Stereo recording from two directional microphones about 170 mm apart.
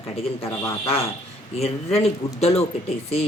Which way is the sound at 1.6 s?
35° left (ahead or behind).